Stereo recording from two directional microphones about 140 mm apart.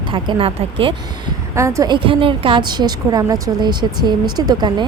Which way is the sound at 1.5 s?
20° right (ahead or behind).